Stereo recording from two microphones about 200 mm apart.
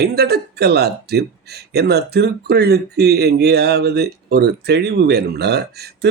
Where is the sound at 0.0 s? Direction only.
55° right (ahead or behind).